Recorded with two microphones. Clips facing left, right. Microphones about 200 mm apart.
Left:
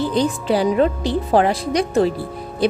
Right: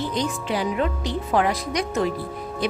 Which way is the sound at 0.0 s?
30° left (ahead or behind).